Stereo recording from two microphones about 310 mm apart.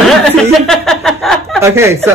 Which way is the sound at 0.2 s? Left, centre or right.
Centre.